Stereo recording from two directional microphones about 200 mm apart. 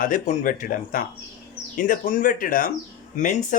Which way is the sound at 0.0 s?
40° left (ahead or behind).